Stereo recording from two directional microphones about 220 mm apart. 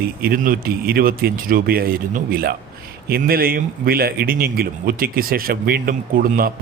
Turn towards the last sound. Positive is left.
turn(degrees=-40)  # may be behind; listen again after turning